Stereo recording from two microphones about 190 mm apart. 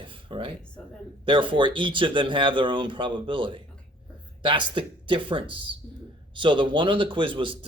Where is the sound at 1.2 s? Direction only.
25° right (ahead or behind).